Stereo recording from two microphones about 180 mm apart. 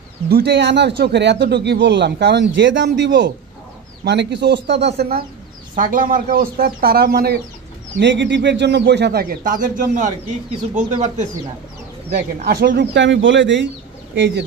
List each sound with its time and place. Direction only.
0.3 s speech: 65° right (ahead or behind)
5.8 s speech: 50° right (ahead or behind)
8.0 s speech: 80° right; by 11.2 s 40° right (ahead or behind)
12.4 s speech: 55° right (ahead or behind)
12.9 s speech: 85° right
14.1 s speech: 80° right